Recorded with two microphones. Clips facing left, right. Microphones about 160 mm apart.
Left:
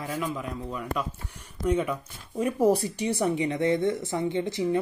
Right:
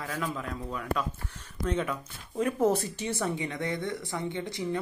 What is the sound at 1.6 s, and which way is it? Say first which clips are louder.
A woman's voice: left 5 dB; 10° left (ahead or behind).